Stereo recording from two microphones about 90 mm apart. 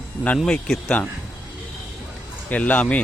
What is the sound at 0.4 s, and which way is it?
Speech, 10° left (ahead or behind).